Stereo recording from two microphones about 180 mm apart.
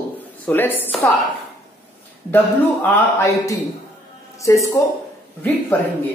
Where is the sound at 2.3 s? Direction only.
15° left (ahead or behind).